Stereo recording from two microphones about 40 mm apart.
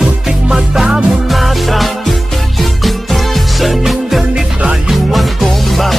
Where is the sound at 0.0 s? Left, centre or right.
Centre.